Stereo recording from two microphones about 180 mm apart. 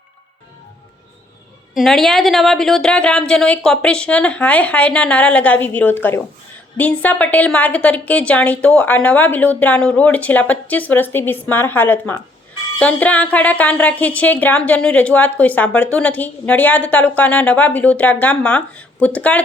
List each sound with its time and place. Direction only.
1.7 s a woman's voice: centre (ahead or behind)